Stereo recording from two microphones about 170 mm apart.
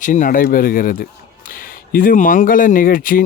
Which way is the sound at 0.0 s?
50° left (ahead or behind).